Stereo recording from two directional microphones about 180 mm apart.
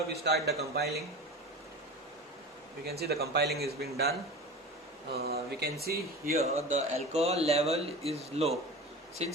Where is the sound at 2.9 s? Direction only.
60° right (ahead or behind).